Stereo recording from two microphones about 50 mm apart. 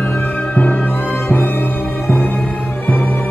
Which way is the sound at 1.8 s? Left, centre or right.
Centre.